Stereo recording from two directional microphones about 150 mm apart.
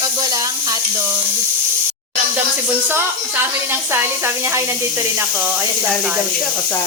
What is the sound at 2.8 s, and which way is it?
Speech, 15° right (ahead or behind).